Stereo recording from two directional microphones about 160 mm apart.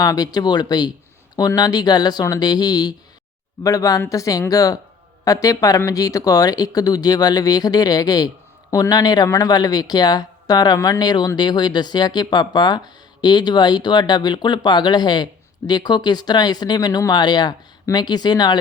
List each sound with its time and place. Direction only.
0.0 s speech: 25° left (ahead or behind)